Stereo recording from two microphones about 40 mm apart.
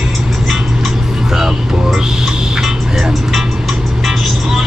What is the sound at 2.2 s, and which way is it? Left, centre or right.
Music, centre.